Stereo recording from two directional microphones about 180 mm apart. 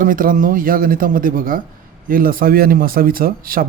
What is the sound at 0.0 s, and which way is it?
Speech, 50° right (ahead or behind).